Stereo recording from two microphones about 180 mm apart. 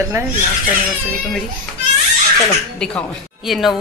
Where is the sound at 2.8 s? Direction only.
5° left (ahead or behind).